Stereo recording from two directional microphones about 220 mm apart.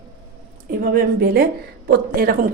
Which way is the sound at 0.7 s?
45° right (ahead or behind).